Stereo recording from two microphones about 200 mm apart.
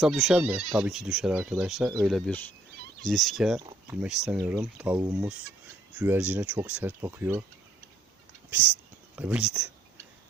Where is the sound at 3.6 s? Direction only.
15° right (ahead or behind).